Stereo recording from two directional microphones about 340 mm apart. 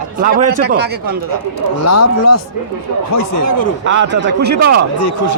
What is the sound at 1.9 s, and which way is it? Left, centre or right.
Speech, left.